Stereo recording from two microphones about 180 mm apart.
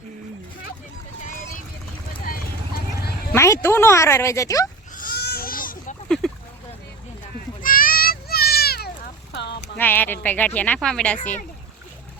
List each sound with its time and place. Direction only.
2.2 s clip-clop: 50° left (ahead or behind)
3.3 s speech: 15° left (ahead or behind)
4.9 s goat: 55° left (ahead or behind)
6.2 s a sound: centre (ahead or behind)
7.6 s children playing: 50° left (ahead or behind)
9.3 s a sound: 75° left (ahead or behind)
9.7 s speech: 10° left (ahead or behind)